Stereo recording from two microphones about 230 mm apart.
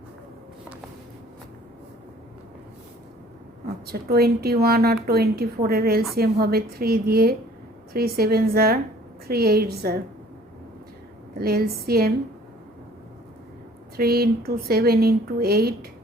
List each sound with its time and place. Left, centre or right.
3.8 s a woman's voice: right
11.3 s speech: right
13.9 s speech: right